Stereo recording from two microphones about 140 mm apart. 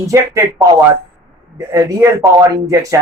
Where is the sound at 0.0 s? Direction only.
20° right (ahead or behind).